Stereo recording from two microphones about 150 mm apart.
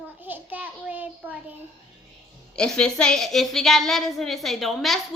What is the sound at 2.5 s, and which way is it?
A woman's voice, 5° left (ahead or behind).